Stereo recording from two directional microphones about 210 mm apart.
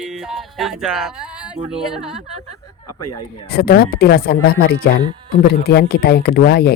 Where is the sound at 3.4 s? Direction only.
50° left (ahead or behind).